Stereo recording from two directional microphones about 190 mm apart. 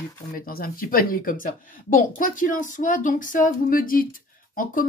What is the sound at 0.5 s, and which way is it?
Speech, 50° left (ahead or behind).